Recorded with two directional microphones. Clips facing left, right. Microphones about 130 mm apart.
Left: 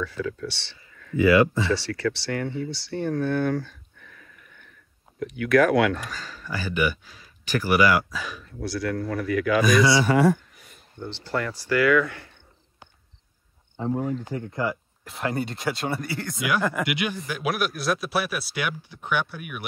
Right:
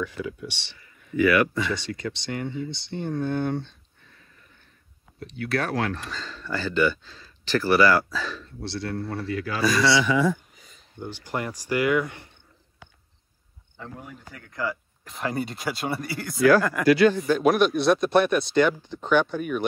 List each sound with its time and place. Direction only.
0.0 s speech: 15° right (ahead or behind)
1.1 s speech: 25° left (ahead or behind)
1.7 s speech: 20° right (ahead or behind)
6.0 s speech: 10° left (ahead or behind)
8.6 s speech: 25° right (ahead or behind)
9.6 s speech: 20° left (ahead or behind)
10.0 s a sound: 60° left (ahead or behind)
11.0 s speech: 15° right (ahead or behind)
14.2 s speech: 25° left (ahead or behind)
15.0 s speech: centre (ahead or behind)
16.8 s speech: 15° left (ahead or behind)
17.3 s speech: 5° left (ahead or behind)